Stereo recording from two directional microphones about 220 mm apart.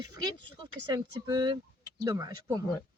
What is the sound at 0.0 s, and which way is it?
Speech, 20° right (ahead or behind).